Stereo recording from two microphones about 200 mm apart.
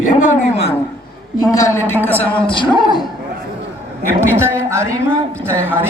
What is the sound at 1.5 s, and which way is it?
A man's voice, 15° left (ahead or behind).